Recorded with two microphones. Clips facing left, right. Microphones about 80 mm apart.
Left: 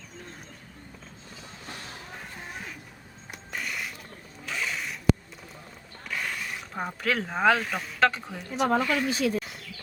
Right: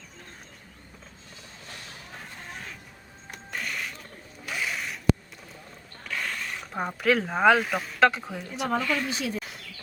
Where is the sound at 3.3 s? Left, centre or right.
Centre.